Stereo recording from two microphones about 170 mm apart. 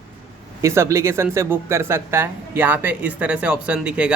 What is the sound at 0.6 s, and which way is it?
Speech, 15° right (ahead or behind).